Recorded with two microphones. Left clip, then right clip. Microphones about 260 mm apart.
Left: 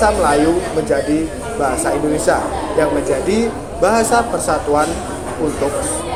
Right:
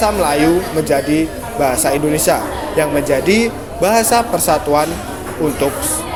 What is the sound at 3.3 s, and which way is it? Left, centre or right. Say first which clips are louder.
Speech: right 3 dB; right.